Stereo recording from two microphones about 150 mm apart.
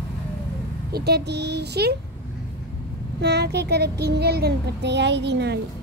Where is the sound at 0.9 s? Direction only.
90° right.